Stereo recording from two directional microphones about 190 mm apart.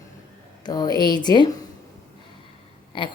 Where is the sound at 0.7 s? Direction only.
20° left (ahead or behind).